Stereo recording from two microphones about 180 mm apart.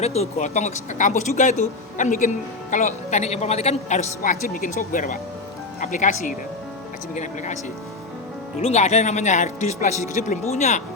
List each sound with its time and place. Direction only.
0.0 s speech: 35° left (ahead or behind)
8.6 s speech: 40° left (ahead or behind)